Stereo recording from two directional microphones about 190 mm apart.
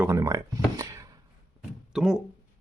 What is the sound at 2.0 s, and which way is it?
Speech, 5° right (ahead or behind).